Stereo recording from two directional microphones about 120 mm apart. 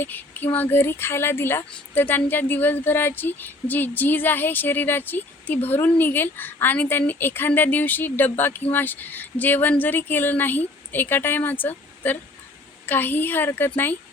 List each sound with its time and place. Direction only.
0.0 s speech: 15° left (ahead or behind)